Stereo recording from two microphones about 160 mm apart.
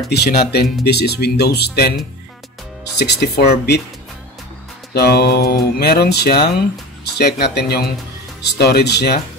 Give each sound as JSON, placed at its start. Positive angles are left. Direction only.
{"t": 0.1, "sound": "speech", "side_deg": 80}
{"t": 3.0, "sound": "speech", "side_deg": 90}
{"t": 4.9, "sound": "speech", "side_deg": 80}